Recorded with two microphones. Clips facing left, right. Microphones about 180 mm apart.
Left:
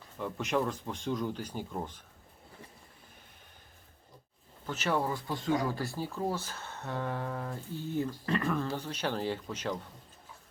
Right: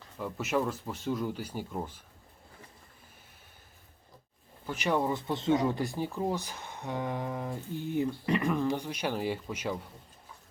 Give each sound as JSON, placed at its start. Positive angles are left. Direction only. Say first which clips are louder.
{"t": 0.2, "sound": "speech", "louder": "right 1 dB", "side_deg": -5}
{"t": 4.6, "sound": "speech", "louder": "right 2 dB", "side_deg": -15}